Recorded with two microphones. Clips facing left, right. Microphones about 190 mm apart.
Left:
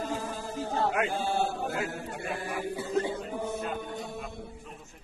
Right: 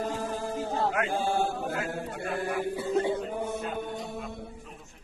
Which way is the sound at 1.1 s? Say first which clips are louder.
Right 2 dB; 50° right (ahead or behind).